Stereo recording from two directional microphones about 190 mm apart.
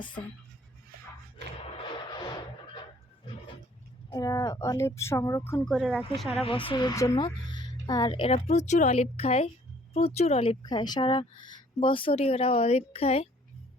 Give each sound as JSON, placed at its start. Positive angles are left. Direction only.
{"t": 1.8, "sound": "vehicle", "side_deg": 25}
{"t": 4.1, "sound": "a woman's voice", "side_deg": 20}
{"t": 6.4, "sound": "speech", "side_deg": 30}
{"t": 10.6, "sound": "speech", "side_deg": 20}